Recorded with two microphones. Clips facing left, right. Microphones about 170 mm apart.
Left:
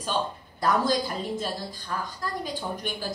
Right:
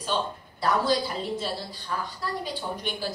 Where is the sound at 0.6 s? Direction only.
45° left (ahead or behind).